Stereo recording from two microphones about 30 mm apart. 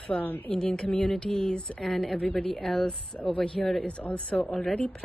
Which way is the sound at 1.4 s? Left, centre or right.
Left.